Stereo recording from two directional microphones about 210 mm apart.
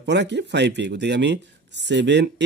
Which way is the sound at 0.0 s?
55° right (ahead or behind).